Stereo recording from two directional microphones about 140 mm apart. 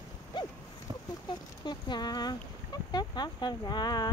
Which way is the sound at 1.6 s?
30° left (ahead or behind).